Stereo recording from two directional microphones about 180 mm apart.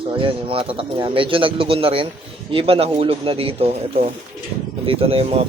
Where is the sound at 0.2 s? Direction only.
30° right (ahead or behind).